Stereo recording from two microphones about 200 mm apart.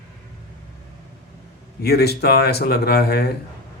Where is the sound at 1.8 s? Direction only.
50° left (ahead or behind).